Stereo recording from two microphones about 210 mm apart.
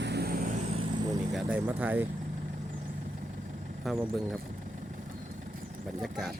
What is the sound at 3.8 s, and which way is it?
Speech, centre (ahead or behind).